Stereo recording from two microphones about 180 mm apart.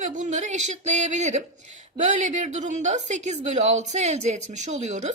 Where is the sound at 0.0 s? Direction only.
40° right (ahead or behind).